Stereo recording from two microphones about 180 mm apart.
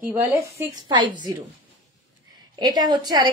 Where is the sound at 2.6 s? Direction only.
20° right (ahead or behind).